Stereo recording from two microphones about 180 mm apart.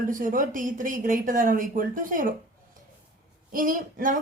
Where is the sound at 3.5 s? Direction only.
50° right (ahead or behind).